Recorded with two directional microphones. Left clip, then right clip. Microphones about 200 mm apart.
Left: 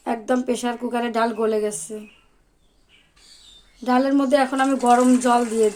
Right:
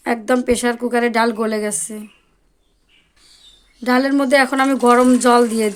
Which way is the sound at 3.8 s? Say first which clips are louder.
Right 3 dB; 40° right (ahead or behind).